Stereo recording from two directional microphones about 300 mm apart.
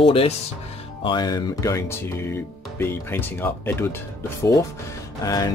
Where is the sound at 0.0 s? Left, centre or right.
Centre.